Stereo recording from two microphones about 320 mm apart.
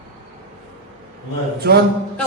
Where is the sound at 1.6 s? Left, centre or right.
Right.